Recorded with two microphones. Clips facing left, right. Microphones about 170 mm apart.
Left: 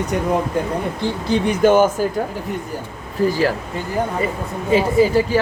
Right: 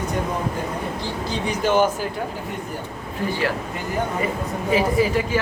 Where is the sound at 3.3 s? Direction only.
40° left (ahead or behind).